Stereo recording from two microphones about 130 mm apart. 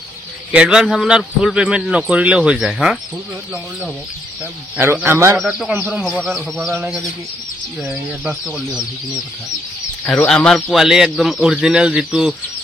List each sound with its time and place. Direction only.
0.5 s a man's voice: 10° right (ahead or behind)
5.0 s a man's voice: 20° right (ahead or behind)
6.0 s a man's voice: 5° left (ahead or behind)
7.8 s a man's voice: 5° right (ahead or behind)